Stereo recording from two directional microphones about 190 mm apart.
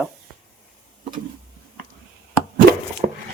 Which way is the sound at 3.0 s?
40° right (ahead or behind).